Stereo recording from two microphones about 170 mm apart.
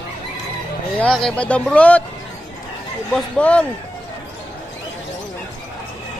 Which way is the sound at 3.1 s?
5° left (ahead or behind).